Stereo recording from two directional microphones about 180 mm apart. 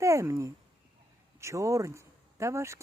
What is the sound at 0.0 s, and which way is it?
Speech, 15° right (ahead or behind).